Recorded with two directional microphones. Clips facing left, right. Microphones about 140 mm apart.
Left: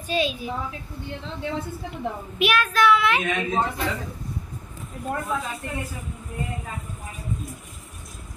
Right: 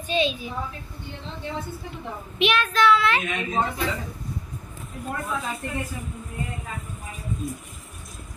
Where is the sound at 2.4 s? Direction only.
5° left (ahead or behind).